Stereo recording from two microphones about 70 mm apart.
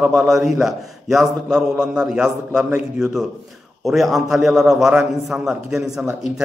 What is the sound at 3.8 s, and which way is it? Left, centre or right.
A man's voice, centre.